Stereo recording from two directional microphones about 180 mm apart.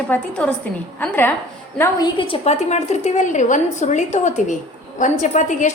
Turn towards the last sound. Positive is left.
turn(degrees=45)  # may be behind; listen again after turning